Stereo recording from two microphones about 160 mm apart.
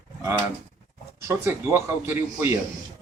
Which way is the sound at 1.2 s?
15° right (ahead or behind).